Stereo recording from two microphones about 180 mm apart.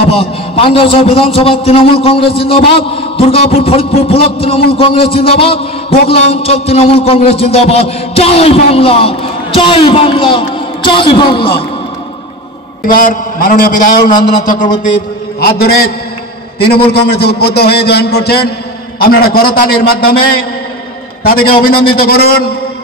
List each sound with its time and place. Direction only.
0.0 s a man's voice: 30° left (ahead or behind)
12.8 s a man's voice: 50° left (ahead or behind)
15.4 s a man's voice: 55° left (ahead or behind)